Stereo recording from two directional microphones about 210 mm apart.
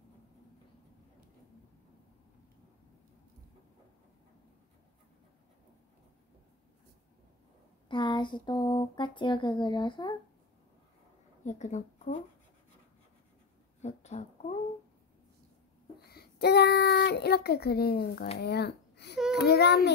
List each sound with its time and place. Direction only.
7.9 s a sound: 20° left (ahead or behind)
11.4 s speech: 35° left (ahead or behind)
13.7 s speech: 30° left (ahead or behind)
16.1 s child singing: 50° left (ahead or behind)
18.4 s speech: 50° left (ahead or behind)
19.4 s child singing: 50° left (ahead or behind)